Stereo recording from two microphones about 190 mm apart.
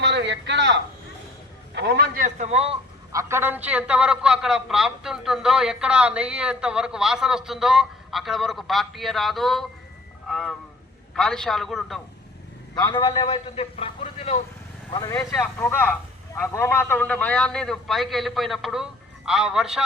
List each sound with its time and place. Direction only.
0.0 s a man's voice: 70° right (ahead or behind)
2.2 s a man's voice: 35° right (ahead or behind)
3.1 s a man's voice: 15° right (ahead or behind); by 11.9 s centre (ahead or behind)
12.8 s a man's voice: 20° left (ahead or behind)
14.8 s speech: 20° left (ahead or behind)
15.4 s a man's voice: 5° left (ahead or behind)